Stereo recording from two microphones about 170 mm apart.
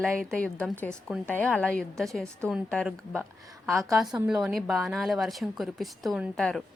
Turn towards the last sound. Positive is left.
turn(degrees=0)  # may be behind; listen again after turning